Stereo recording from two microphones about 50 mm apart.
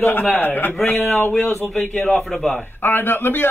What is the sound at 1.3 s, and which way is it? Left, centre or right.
Speech, centre.